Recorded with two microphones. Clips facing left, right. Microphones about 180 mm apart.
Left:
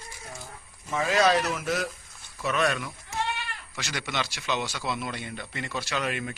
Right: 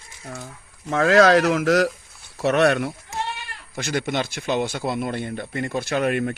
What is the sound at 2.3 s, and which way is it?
Speech, 70° right (ahead or behind).